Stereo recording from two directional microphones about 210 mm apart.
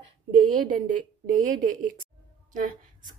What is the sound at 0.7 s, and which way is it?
Speech, 40° right (ahead or behind).